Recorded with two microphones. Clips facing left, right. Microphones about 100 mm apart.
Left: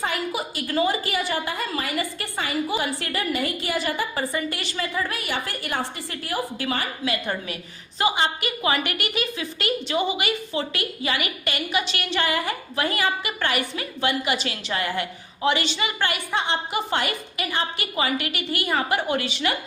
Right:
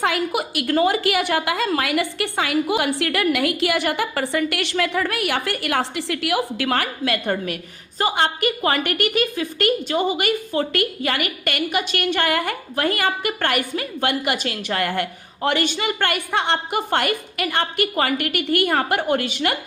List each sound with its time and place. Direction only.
0.0 s a woman's voice: 70° right (ahead or behind); by 19.5 s 50° right (ahead or behind)